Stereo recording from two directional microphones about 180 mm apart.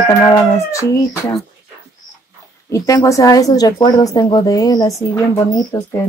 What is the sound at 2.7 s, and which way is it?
Speech, 20° left (ahead or behind).